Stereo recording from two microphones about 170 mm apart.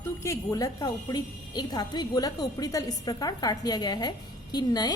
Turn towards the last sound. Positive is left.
turn(degrees=25)  # may be behind; listen again after turning